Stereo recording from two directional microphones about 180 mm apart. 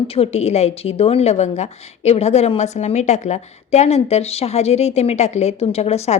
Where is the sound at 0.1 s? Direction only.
35° left (ahead or behind).